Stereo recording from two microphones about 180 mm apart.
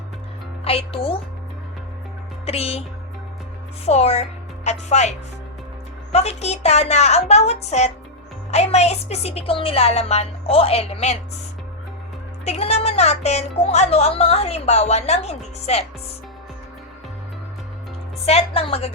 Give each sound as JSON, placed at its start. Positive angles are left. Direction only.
{"t": 0.6, "sound": "speech", "side_deg": 35}
{"t": 2.5, "sound": "speech", "side_deg": 35}
{"t": 3.8, "sound": "speech", "side_deg": 35}
{"t": 12.5, "sound": "speech", "side_deg": 35}
{"t": 18.3, "sound": "speech", "side_deg": 35}